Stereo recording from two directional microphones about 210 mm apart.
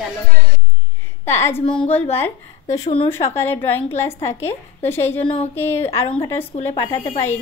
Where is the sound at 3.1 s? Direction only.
10° left (ahead or behind).